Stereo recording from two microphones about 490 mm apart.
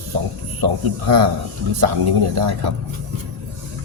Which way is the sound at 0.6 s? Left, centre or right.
Right.